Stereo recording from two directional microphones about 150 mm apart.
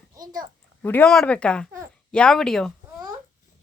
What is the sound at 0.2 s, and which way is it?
Speech, 25° right (ahead or behind).